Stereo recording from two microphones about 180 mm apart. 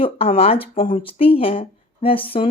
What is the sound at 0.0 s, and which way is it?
Speech, 35° left (ahead or behind).